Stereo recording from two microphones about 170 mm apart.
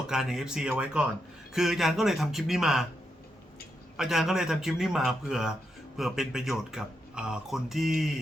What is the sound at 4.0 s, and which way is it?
Speech, centre (ahead or behind).